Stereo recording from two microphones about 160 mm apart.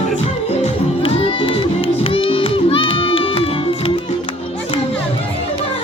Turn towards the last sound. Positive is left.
turn(degrees=35)  # may be behind; listen again after turning